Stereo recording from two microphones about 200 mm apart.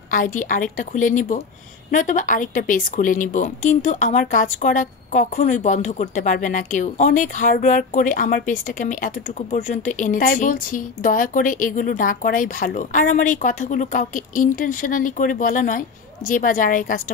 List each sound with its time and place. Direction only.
0.1 s a woman's voice: 40° left (ahead or behind)